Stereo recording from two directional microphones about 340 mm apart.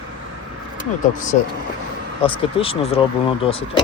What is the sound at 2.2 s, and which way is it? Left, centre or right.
Speech, centre.